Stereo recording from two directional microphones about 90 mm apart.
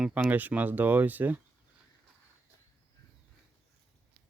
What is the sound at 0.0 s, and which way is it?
Speech, 20° right (ahead or behind).